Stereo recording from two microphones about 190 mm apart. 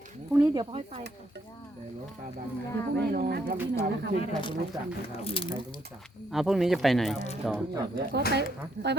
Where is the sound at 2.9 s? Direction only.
55° right (ahead or behind).